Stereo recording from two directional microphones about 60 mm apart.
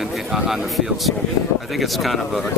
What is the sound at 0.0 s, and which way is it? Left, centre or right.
Speech, centre.